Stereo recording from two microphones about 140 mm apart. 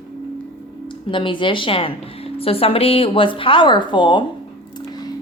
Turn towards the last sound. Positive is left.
turn(degrees=35)  # may be behind; listen again after turning